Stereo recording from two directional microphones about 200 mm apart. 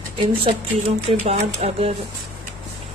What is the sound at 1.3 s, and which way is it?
Speech, 30° right (ahead or behind).